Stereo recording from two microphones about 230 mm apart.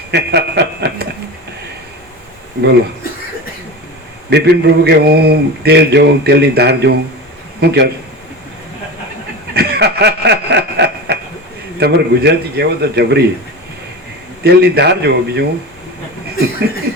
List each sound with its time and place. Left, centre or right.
0.1 s speech: right
4.3 s speech: right
9.6 s a sound: right
11.8 s speech: right
14.4 s speech: right